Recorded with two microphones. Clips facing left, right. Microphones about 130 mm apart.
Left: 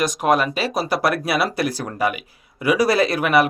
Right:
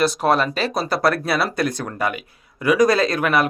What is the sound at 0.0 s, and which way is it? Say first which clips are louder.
Speech: even; 15° left (ahead or behind).